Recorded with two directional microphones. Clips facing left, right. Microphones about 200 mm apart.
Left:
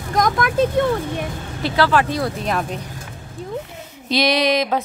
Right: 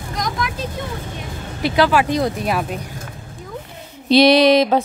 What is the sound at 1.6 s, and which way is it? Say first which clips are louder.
Speech: right 2 dB; 15° right (ahead or behind).